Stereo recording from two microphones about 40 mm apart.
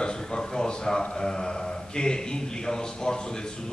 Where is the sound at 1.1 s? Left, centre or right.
Centre.